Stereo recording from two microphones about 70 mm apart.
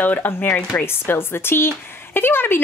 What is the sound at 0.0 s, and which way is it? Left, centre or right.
A woman's voice, left.